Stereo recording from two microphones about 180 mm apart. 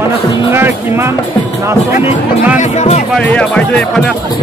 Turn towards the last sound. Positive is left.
turn(degrees=5)  # may be behind; listen again after turning